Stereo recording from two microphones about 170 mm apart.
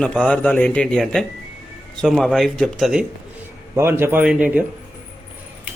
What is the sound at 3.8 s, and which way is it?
Speech, 15° right (ahead or behind).